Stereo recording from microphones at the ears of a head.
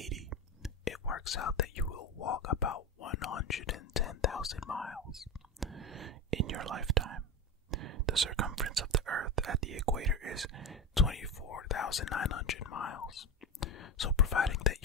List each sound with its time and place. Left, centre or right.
0.8 s speech: left
5.9 s speech: right
11.1 s speech: left